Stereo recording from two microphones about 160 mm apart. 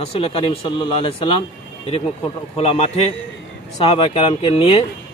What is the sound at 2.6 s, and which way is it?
Speech, 40° left (ahead or behind).